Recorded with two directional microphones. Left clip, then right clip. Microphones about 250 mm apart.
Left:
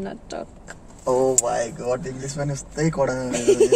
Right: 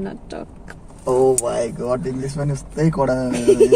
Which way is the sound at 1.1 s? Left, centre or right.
Left.